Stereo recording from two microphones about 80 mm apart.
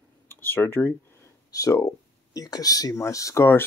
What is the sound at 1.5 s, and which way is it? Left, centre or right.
Speech, left.